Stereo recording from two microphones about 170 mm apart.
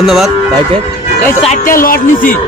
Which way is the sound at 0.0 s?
Centre (ahead or behind).